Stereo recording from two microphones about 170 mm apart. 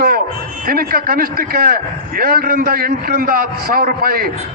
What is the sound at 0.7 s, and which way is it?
A man's voice, 60° right (ahead or behind).